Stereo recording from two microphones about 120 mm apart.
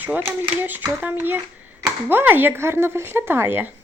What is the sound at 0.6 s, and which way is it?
Speech, 15° right (ahead or behind).